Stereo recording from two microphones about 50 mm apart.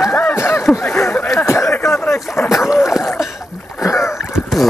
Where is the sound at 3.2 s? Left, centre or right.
Centre.